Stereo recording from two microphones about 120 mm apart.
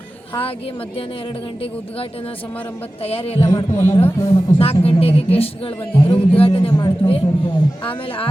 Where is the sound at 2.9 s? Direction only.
55° left (ahead or behind).